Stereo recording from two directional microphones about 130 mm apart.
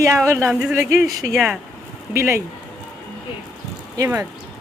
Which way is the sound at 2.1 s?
20° right (ahead or behind).